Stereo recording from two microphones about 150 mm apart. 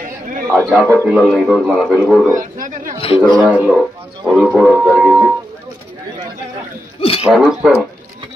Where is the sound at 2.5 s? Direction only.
60° right (ahead or behind).